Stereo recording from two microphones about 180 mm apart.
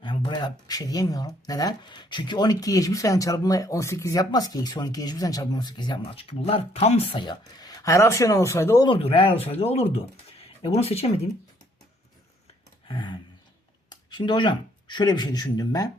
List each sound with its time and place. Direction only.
0.0 s speech: 25° left (ahead or behind)
8.9 s speech: 30° left (ahead or behind)
12.9 s a sound: 25° left (ahead or behind)
13.9 s speech: 25° left (ahead or behind)